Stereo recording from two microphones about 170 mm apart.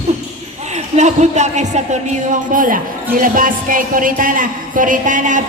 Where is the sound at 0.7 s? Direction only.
45° right (ahead or behind).